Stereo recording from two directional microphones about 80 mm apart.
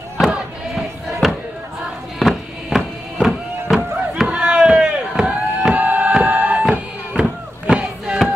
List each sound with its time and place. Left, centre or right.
0.2 s crowd: centre
2.1 s music: centre
3.7 s chop: centre
5.8 s music: centre
7.7 s a sound: centre